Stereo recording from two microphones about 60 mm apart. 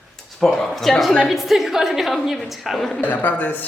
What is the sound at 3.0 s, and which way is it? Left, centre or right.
Speech, left.